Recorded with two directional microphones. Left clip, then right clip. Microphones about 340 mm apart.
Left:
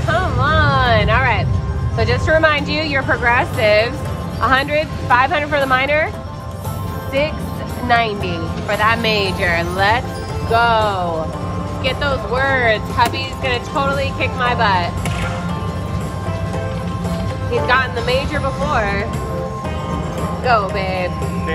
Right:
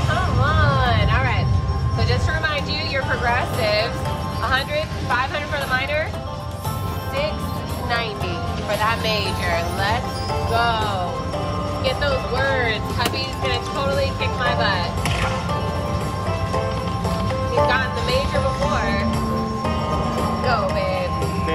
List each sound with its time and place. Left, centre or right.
0.1 s vehicle: centre
4.4 s speech: centre
7.9 s speech: centre
17.6 s music: centre
20.4 s music: centre